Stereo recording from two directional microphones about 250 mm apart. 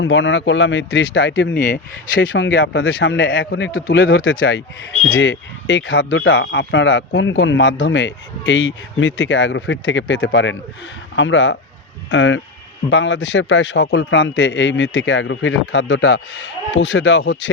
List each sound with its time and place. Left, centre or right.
0.0 s speech: left
1.5 s speech: left
2.2 s speech: left